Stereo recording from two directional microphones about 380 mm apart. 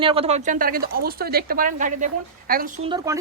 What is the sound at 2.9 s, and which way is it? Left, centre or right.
Speech, centre.